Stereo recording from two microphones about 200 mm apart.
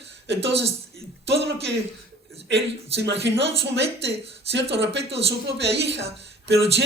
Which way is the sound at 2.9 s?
60° right (ahead or behind).